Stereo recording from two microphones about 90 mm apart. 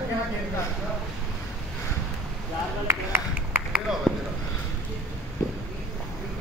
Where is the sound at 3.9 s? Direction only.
5° right (ahead or behind).